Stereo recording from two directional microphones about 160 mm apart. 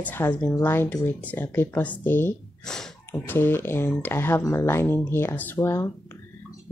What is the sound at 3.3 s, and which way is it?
Speech, 15° left (ahead or behind).